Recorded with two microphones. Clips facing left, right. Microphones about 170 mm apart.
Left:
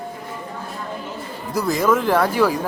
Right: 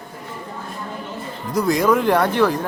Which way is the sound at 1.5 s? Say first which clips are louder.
Right 2 dB; 5° left (ahead or behind).